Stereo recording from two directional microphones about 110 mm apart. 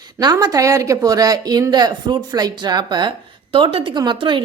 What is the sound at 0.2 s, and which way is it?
Speech, 40° right (ahead or behind).